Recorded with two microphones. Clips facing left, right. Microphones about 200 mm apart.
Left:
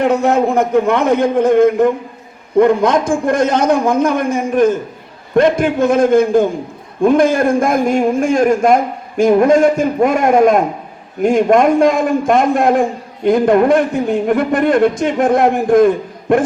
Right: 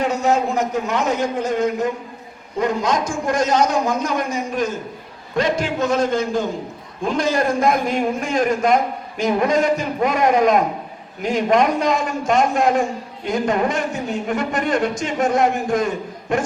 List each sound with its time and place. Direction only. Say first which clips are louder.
0.0 s a man's voice: left 6 dB; 55° left (ahead or behind)